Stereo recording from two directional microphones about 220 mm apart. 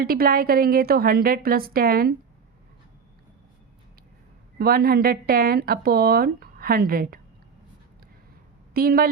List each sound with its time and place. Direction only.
0.0 s a woman's voice: 45° right (ahead or behind)
4.5 s speech: 45° right (ahead or behind)
8.7 s a woman's voice: 40° right (ahead or behind)